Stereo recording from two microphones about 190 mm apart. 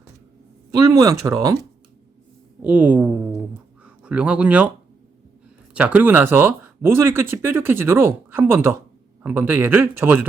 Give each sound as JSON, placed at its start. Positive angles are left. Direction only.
{"t": 0.7, "sound": "speech", "side_deg": -15}
{"t": 2.6, "sound": "speech", "side_deg": -5}
{"t": 5.7, "sound": "speech", "side_deg": -10}